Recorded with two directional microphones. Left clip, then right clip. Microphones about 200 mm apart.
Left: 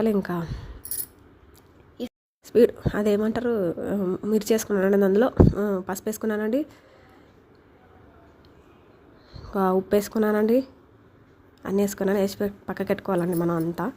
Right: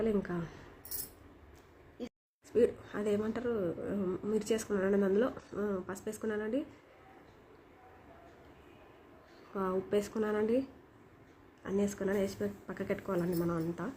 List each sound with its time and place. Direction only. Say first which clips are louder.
0.0 s speech: left 9 dB; 45° left (ahead or behind)
2.0 s speech: left 10 dB; 45° left (ahead or behind)
9.5 s speech: left 12 dB; 45° left (ahead or behind)
11.6 s speech: left 10 dB; 40° left (ahead or behind)